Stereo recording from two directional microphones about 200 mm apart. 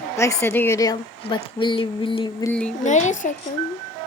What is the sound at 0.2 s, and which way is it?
A woman's voice, 15° left (ahead or behind).